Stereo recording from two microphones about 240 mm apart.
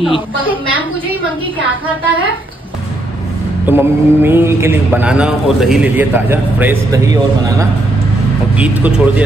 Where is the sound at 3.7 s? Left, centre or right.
Centre.